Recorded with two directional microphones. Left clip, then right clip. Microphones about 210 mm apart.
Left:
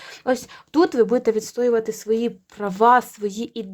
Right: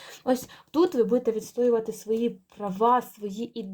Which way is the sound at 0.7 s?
40° left (ahead or behind).